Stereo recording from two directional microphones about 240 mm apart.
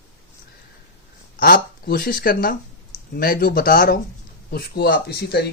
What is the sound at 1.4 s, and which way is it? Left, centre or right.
Speech, left.